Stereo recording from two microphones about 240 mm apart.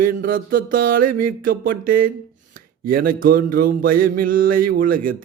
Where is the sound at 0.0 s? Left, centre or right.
Right.